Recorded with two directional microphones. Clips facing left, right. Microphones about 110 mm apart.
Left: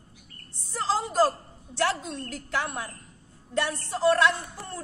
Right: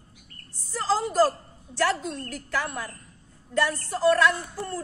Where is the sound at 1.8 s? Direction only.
20° left (ahead or behind).